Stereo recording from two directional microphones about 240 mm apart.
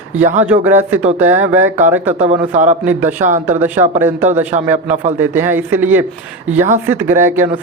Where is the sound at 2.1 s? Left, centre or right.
Right.